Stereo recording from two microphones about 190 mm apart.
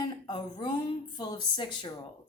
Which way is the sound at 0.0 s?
25° left (ahead or behind).